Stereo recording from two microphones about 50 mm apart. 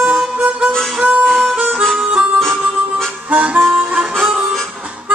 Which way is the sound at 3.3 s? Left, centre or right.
Right.